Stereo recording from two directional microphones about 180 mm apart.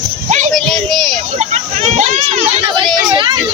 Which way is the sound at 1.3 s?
40° right (ahead or behind).